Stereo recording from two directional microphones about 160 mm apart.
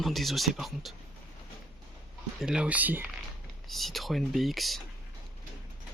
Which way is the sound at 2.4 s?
5° right (ahead or behind).